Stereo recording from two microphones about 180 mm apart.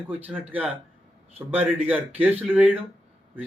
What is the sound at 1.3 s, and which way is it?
A man's voice, 10° right (ahead or behind).